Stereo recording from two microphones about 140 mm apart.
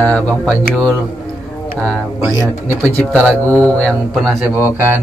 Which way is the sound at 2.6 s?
15° left (ahead or behind).